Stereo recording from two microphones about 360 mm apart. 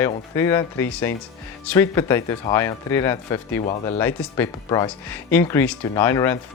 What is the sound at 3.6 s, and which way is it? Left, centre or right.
Speech, centre.